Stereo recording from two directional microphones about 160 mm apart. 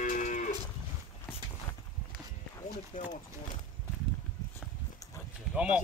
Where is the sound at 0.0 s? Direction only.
55° left (ahead or behind).